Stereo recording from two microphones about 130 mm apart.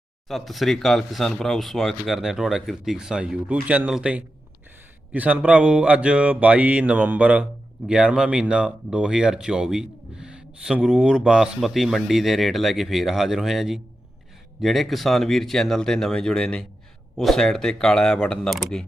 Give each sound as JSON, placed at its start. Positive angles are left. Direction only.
{"t": 0.3, "sound": "speech", "side_deg": 0}